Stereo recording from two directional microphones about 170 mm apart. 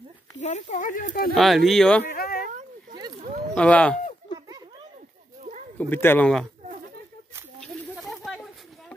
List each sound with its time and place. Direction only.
0.4 s speech: 45° left (ahead or behind)
1.3 s speech: centre (ahead or behind)
2.1 s cat: 65° left (ahead or behind)
3.5 s speech: 5° left (ahead or behind)
5.8 s speech: 10° left (ahead or behind)
7.9 s snake: centre (ahead or behind)